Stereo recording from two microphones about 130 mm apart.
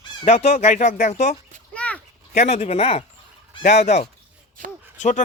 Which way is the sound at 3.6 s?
65° left (ahead or behind).